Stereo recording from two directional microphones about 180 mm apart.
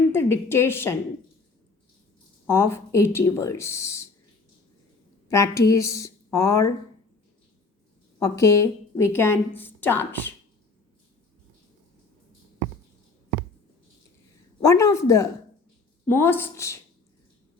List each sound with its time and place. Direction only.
0.1 s a woman's voice: 15° left (ahead or behind)
2.5 s a woman's voice: 15° left (ahead or behind)
5.3 s a woman's voice: 15° left (ahead or behind)
8.2 s a woman's voice: 15° left (ahead or behind)
14.6 s a woman's voice: 15° left (ahead or behind)